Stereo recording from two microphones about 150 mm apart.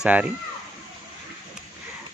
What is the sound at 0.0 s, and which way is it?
Speech, 5° right (ahead or behind).